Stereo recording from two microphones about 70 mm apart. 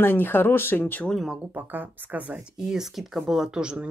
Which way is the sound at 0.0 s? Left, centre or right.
Left.